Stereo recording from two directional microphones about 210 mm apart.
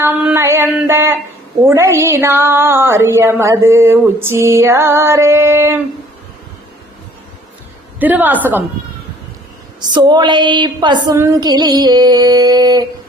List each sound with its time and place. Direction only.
0.0 s speech: 5° right (ahead or behind)
7.9 s speech: 10° right (ahead or behind)
9.9 s music: 20° right (ahead or behind)